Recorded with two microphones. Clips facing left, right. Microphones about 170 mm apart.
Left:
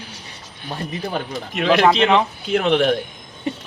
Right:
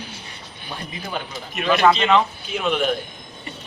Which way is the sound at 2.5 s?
70° left (ahead or behind).